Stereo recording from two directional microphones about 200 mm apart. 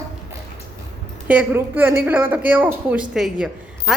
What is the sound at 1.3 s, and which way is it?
A woman's voice, 10° right (ahead or behind).